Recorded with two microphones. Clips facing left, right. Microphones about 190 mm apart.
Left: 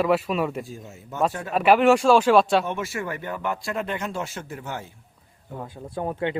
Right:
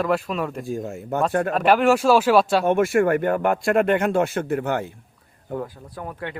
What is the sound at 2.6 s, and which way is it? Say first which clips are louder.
Speech: right 11 dB; 55° right (ahead or behind).